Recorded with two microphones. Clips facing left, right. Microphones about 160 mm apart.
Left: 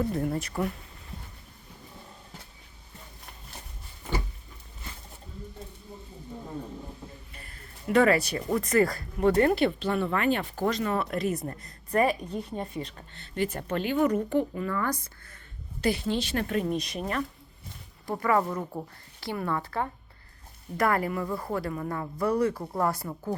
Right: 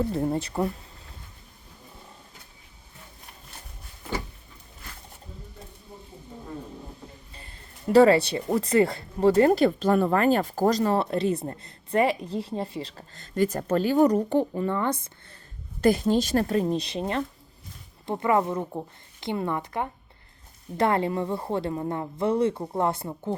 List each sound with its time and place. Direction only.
0.0 s speech: 30° right (ahead or behind)
7.3 s speech: 30° right (ahead or behind)
9.5 s speech: 40° right (ahead or behind); by 15.4 s 25° right (ahead or behind)
15.8 s speech: 45° right (ahead or behind); by 23.3 s 25° right (ahead or behind)